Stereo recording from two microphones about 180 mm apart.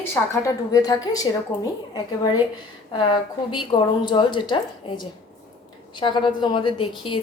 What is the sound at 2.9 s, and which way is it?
A woman's voice, 25° left (ahead or behind).